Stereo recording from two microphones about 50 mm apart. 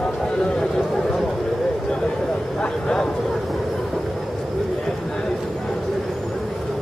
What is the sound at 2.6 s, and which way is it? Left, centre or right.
Vehicle, centre.